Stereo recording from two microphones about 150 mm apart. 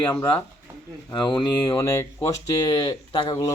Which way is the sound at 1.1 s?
30° left (ahead or behind).